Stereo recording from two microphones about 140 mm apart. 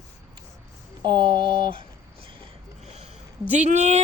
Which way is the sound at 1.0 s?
35° right (ahead or behind).